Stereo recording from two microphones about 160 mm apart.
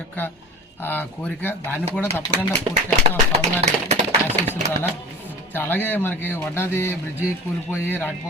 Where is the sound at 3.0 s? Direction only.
45° right (ahead or behind).